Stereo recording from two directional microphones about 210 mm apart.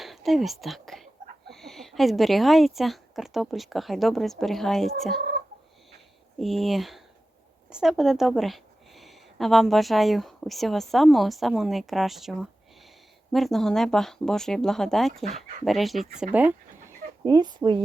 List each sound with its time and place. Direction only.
0.0 s speech: centre (ahead or behind)
6.4 s speech: centre (ahead or behind)
17.2 s speech: 20° right (ahead or behind)